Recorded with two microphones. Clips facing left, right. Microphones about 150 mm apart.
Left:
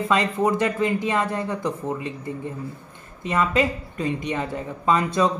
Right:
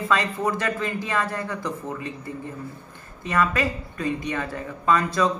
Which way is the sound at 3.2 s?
20° left (ahead or behind).